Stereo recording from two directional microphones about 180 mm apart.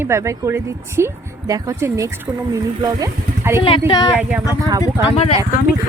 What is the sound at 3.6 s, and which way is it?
Speech, 30° left (ahead or behind).